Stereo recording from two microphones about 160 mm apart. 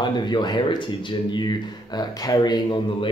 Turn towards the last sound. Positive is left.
turn(degrees=25)  # may be behind; listen again after turning